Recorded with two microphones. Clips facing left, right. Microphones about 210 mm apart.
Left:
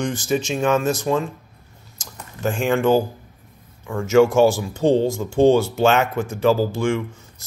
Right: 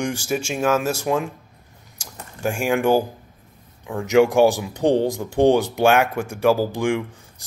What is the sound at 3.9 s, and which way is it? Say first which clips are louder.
Speech: left 1 dB; 15° right (ahead or behind).